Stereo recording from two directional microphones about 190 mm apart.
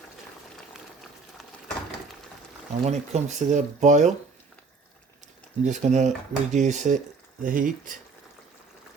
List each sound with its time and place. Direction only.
2.8 s speech: 35° right (ahead or behind)
5.6 s speech: 40° right (ahead or behind)